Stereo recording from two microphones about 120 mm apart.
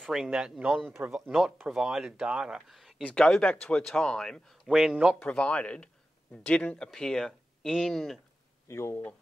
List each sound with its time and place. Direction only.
0.0 s speech: 5° right (ahead or behind)
3.0 s speech: 10° left (ahead or behind)
5.2 s speech: 10° left (ahead or behind)
8.6 s speech: 20° left (ahead or behind)